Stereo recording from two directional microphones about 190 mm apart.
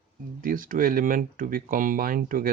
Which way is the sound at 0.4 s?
45° right (ahead or behind).